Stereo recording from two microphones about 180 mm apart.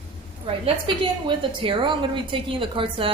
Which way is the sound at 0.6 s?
30° right (ahead or behind).